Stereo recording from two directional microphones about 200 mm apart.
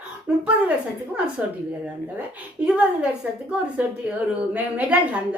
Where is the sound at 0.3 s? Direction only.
5° right (ahead or behind).